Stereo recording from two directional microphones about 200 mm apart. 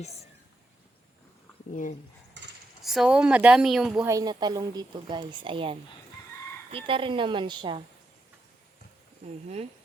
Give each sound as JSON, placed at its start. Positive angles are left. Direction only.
{"t": 1.7, "sound": "speech", "side_deg": 40}
{"t": 2.8, "sound": "speech", "side_deg": 0}
{"t": 4.0, "sound": "speech", "side_deg": -15}
{"t": 9.2, "sound": "speech", "side_deg": -35}